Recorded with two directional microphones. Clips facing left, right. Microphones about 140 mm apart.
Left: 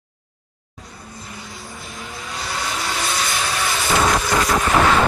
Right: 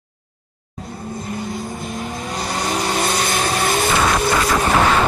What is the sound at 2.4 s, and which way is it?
Vehicle, 45° right (ahead or behind).